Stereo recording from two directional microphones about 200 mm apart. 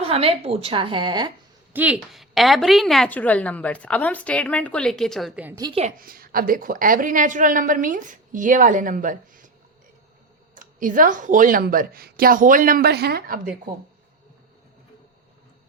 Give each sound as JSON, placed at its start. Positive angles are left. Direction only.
{"t": 0.0, "sound": "a woman's voice", "side_deg": -30}
{"t": 1.7, "sound": "a woman's voice", "side_deg": -5}
{"t": 6.0, "sound": "a woman's voice", "side_deg": -45}
{"t": 10.5, "sound": "speech", "side_deg": -40}